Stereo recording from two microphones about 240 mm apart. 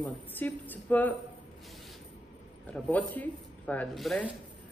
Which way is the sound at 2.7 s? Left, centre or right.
Centre.